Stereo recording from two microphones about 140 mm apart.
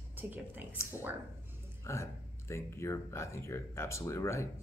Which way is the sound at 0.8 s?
20° left (ahead or behind).